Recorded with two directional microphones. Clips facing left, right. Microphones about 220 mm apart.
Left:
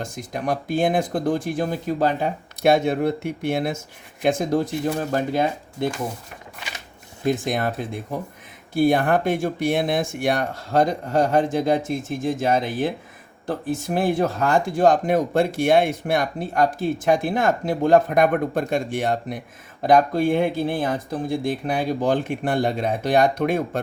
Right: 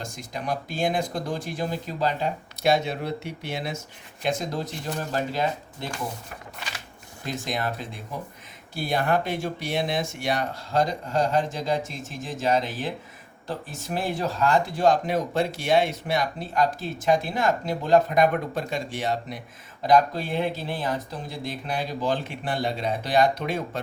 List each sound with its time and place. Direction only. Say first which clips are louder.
0.0 s speech: left 6 dB; 50° left (ahead or behind)
7.3 s speech: left 7 dB; 50° left (ahead or behind)